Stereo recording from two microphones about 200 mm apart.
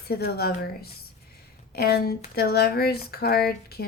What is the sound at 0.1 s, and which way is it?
Speech, 50° left (ahead or behind).